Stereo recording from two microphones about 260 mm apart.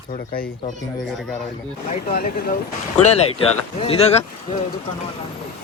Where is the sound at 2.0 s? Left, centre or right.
Left.